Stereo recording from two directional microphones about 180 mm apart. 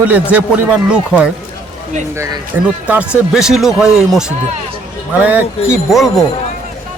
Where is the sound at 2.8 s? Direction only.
5° right (ahead or behind).